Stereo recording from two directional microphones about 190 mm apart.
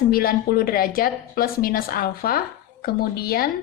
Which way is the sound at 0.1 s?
50° left (ahead or behind).